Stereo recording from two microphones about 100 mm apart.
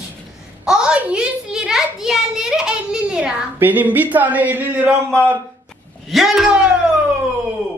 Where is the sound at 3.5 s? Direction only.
20° right (ahead or behind).